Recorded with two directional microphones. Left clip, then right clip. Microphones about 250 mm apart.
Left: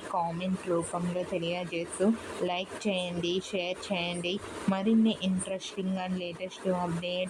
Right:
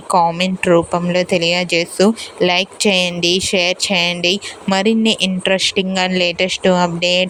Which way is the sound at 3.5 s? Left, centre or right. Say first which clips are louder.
Right 17 dB; right.